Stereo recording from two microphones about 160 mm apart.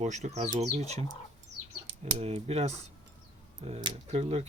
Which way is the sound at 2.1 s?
40° right (ahead or behind).